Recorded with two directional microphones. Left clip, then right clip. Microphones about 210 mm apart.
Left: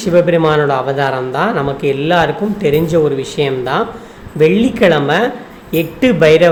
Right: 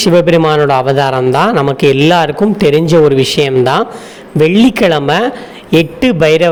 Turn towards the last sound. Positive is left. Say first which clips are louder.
# even
turn(degrees=-40)  # may be behind; listen again after turning